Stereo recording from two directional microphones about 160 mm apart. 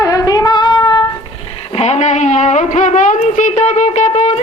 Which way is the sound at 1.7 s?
40° left (ahead or behind).